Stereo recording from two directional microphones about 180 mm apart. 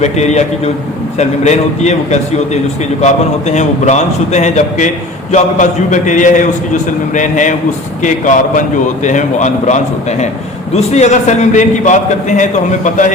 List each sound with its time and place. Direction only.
0.0 s a man's voice: 40° left (ahead or behind)